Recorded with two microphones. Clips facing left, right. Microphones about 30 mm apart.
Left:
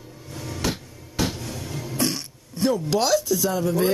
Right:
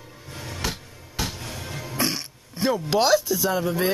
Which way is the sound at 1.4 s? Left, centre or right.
Right.